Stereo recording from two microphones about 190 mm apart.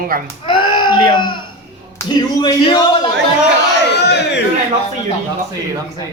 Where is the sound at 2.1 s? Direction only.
25° left (ahead or behind).